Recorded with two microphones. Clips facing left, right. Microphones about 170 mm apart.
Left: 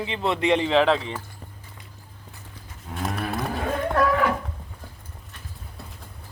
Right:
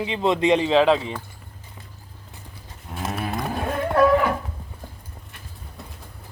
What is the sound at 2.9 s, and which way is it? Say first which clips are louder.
Livestock: even; centre (ahead or behind).